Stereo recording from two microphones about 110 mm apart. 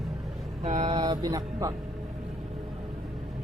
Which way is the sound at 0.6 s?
90° right.